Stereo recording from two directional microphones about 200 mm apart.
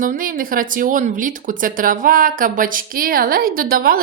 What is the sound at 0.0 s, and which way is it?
Speech, 45° right (ahead or behind).